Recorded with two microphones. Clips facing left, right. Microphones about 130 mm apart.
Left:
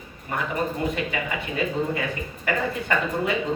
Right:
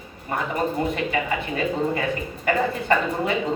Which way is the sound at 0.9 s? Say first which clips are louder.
Right 3 dB; 35° right (ahead or behind).